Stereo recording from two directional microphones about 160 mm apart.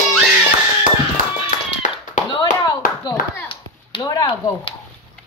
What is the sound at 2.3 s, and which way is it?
Clapping, 30° left (ahead or behind).